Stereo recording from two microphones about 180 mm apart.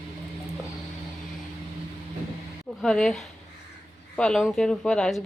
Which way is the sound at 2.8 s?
5° left (ahead or behind).